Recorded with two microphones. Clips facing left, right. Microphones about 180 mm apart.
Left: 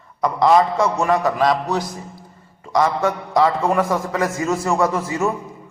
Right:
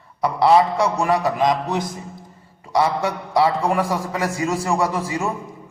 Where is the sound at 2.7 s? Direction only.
10° right (ahead or behind).